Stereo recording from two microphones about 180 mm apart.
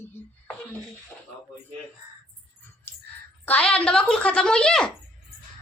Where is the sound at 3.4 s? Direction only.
10° left (ahead or behind).